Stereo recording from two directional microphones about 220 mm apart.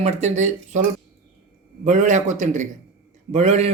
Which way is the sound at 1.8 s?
35° right (ahead or behind).